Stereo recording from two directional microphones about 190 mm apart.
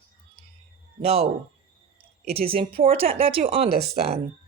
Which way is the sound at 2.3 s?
30° right (ahead or behind).